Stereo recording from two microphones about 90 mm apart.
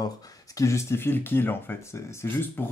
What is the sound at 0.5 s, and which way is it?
Speech, 35° left (ahead or behind).